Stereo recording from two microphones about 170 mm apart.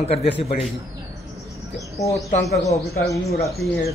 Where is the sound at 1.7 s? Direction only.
20° left (ahead or behind).